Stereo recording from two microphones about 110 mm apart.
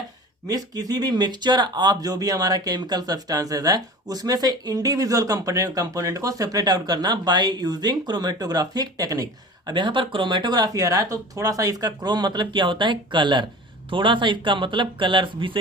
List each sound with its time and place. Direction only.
0.4 s speech: 35° right (ahead or behind)